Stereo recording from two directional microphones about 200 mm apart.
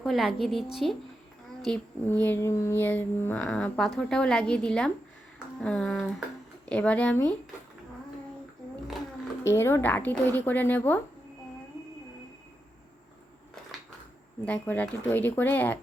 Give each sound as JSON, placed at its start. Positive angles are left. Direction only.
{"t": 0.0, "sound": "a woman's voice", "side_deg": 0}
{"t": 1.6, "sound": "child singing", "side_deg": 5}
{"t": 5.5, "sound": "a woman's voice", "side_deg": 5}
{"t": 6.7, "sound": "child singing", "side_deg": 5}
{"t": 9.4, "sound": "child singing", "side_deg": 10}
{"t": 14.4, "sound": "child singing", "side_deg": 5}